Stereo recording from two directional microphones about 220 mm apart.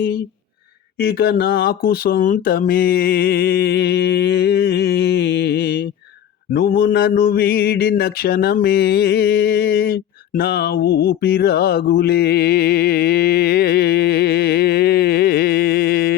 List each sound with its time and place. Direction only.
0.9 s speech: 45° left (ahead or behind)
6.5 s mantra: 45° left (ahead or behind)